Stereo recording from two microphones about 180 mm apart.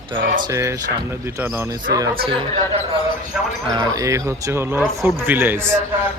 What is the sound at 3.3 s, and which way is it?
Speech, 5° right (ahead or behind).